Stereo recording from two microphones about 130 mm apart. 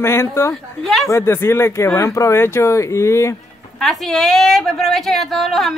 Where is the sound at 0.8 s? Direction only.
Centre (ahead or behind).